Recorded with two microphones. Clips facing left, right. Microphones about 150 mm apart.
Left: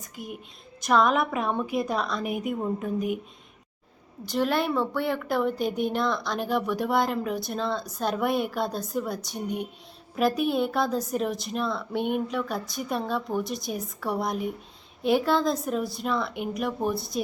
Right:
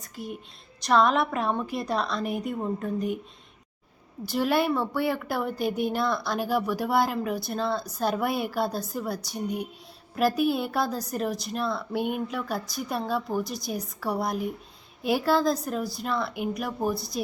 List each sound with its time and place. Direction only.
0.9 s speech: centre (ahead or behind)
4.3 s speech: 5° right (ahead or behind)